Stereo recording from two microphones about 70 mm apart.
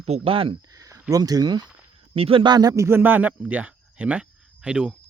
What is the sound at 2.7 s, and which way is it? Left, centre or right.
Speech, right.